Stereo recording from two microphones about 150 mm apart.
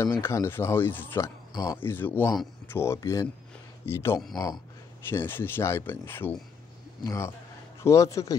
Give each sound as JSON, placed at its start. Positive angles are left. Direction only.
{"t": 0.2, "sound": "speech", "side_deg": 15}
{"t": 1.5, "sound": "speech", "side_deg": 25}
{"t": 1.8, "sound": "a man's voice", "side_deg": 15}